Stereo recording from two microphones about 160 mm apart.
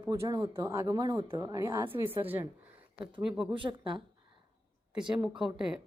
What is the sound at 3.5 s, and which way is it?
Speech, 30° right (ahead or behind).